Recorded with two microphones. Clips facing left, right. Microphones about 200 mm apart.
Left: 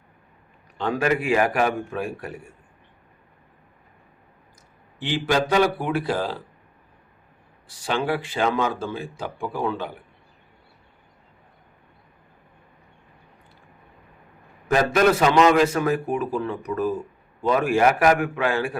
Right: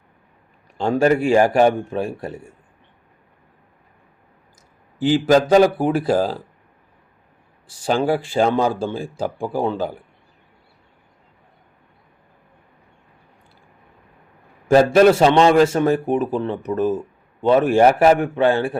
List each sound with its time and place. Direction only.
0.8 s a man's voice: 30° right (ahead or behind)
4.9 s speech: 40° right (ahead or behind)
7.9 s speech: 35° right (ahead or behind)
14.7 s a man's voice: 30° right (ahead or behind)